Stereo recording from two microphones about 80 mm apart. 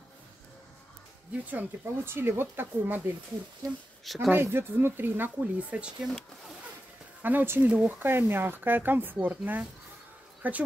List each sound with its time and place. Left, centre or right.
1.4 s speech: right
4.0 s speech: centre
4.3 s speech: right; by 6.0 s centre
7.2 s speech: right